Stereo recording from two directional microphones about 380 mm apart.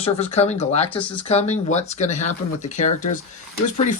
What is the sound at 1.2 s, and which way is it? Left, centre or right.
Speech, centre.